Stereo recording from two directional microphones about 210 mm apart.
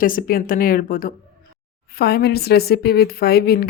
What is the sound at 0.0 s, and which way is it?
A woman's voice, 40° left (ahead or behind).